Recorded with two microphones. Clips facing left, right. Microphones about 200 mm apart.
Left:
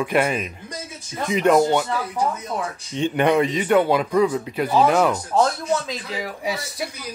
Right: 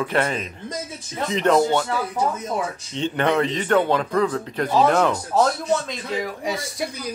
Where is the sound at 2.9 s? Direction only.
15° left (ahead or behind).